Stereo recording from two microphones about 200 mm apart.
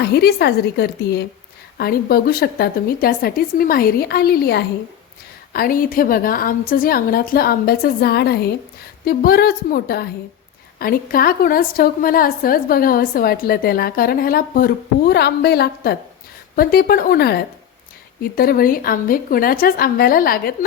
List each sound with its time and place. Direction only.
0.0 s a woman's voice: 50° left (ahead or behind)